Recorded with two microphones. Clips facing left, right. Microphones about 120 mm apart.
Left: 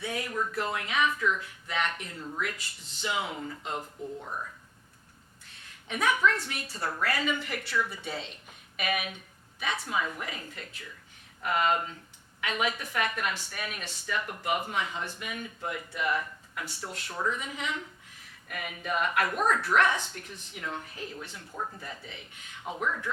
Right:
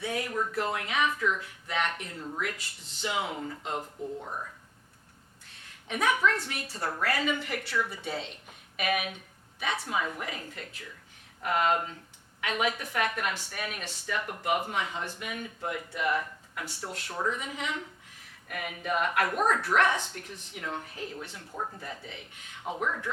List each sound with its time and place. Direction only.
0.0 s a woman's voice: 45° right (ahead or behind)
0.3 s speech: 35° right (ahead or behind)
0.6 s a woman's voice: 45° right (ahead or behind)
2.8 s speech: 65° right (ahead or behind)
3.3 s speech: 35° right (ahead or behind)
5.6 s a woman's voice: 50° right (ahead or behind)
17.4 s a woman's voice: 50° right (ahead or behind)
19.4 s a woman's voice: 35° right (ahead or behind)
21.5 s speech: 30° right (ahead or behind)
22.6 s speech: 30° right (ahead or behind)